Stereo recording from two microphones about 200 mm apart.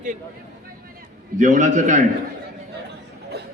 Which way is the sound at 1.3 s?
40° right (ahead or behind).